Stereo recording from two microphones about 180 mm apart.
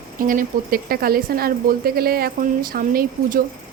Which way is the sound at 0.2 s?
50° right (ahead or behind).